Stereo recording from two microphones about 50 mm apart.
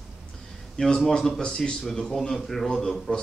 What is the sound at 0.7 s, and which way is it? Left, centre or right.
A man's voice, centre.